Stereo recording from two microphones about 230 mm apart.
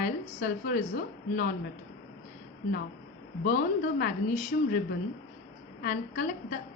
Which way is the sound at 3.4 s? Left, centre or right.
Left.